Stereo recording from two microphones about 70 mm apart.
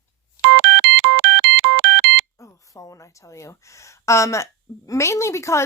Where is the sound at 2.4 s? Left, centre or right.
Left.